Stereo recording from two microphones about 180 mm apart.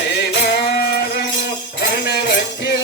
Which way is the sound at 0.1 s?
65° left (ahead or behind).